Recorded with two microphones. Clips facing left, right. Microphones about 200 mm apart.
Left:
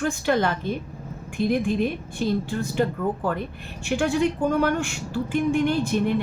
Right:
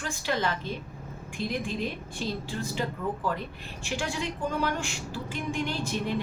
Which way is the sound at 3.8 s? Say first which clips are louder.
Left 10 dB; 55° left (ahead or behind).